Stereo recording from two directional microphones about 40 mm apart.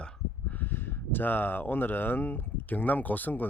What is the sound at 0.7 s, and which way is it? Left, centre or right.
Speech, left.